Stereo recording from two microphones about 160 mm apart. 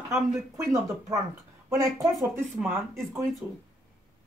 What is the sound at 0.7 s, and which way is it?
Speech, 20° right (ahead or behind).